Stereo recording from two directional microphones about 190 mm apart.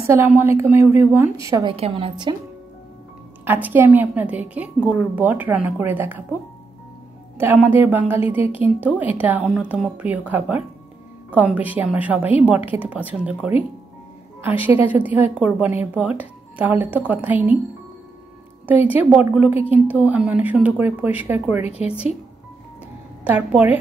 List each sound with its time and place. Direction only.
0.1 s a woman's voice: 10° right (ahead or behind)
1.7 s a woman's voice: 30° right (ahead or behind)
3.4 s a woman's voice: 10° right (ahead or behind)
7.3 s a woman's voice: 10° right (ahead or behind)
18.7 s a woman's voice: 10° right (ahead or behind)
23.2 s a woman's voice: 5° right (ahead or behind)